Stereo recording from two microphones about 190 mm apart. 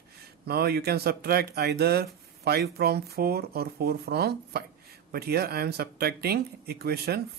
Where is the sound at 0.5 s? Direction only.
55° right (ahead or behind).